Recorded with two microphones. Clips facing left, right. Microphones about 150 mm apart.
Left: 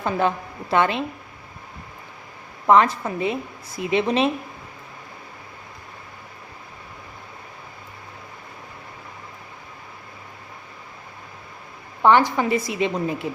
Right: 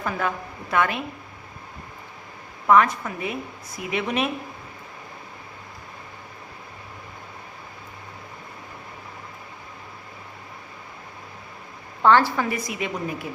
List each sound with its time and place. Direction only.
0.0 s a woman's voice: 25° left (ahead or behind)
2.6 s a woman's voice: 30° left (ahead or behind)
12.0 s a woman's voice: 15° left (ahead or behind)